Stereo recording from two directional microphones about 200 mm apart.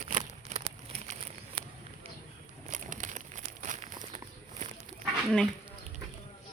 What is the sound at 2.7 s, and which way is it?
Crumpling, 40° right (ahead or behind).